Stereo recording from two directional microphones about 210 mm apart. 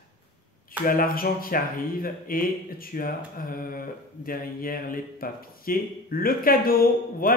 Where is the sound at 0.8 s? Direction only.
45° left (ahead or behind).